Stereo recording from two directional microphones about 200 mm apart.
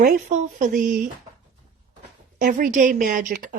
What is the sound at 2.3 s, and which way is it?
Speech, 40° right (ahead or behind).